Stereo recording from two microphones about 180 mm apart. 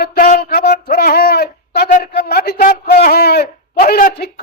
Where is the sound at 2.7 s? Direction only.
50° left (ahead or behind).